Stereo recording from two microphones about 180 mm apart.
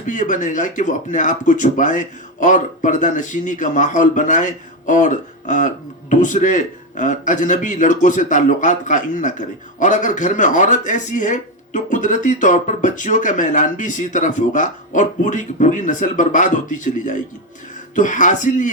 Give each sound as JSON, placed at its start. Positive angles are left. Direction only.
{"t": 0.0, "sound": "speech", "side_deg": 45}